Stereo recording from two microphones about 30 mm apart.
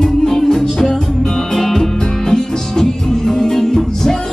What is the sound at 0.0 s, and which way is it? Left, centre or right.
Music, centre.